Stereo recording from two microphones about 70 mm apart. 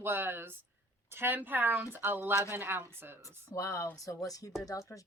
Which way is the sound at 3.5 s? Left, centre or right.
Left.